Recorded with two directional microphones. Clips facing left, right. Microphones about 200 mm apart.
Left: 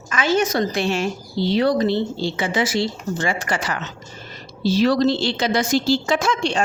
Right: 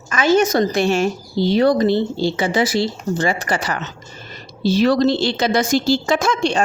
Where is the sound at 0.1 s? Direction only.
45° right (ahead or behind).